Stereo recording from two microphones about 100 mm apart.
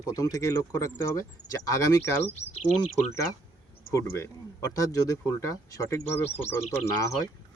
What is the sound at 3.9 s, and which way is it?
Speech, 30° left (ahead or behind).